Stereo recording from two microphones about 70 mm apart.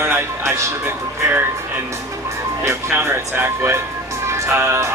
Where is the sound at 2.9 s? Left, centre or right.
Right.